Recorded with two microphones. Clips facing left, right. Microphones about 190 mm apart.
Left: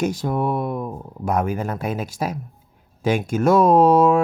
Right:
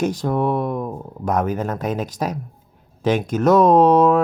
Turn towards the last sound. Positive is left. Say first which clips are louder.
# right 1 dB
turn(degrees=10)  # may be behind; listen again after turning